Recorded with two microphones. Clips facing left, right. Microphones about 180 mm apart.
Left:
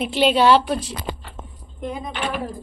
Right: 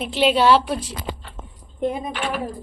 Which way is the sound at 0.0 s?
Centre (ahead or behind).